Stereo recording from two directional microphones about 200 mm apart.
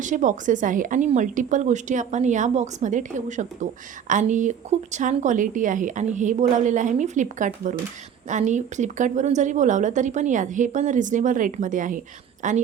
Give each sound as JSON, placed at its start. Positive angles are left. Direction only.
{"t": 0.0, "sound": "a woman's voice", "side_deg": -40}